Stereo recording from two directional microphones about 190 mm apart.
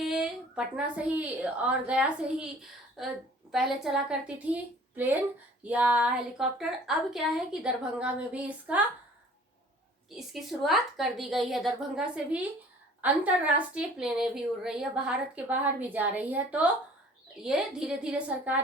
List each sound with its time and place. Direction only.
0.0 s a woman's voice: centre (ahead or behind)
10.1 s a woman's voice: centre (ahead or behind)